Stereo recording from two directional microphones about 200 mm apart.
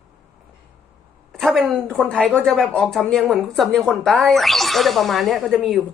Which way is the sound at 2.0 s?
5° left (ahead or behind).